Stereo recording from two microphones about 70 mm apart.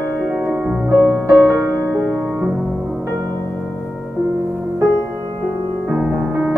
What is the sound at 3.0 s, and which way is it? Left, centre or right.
Music, right.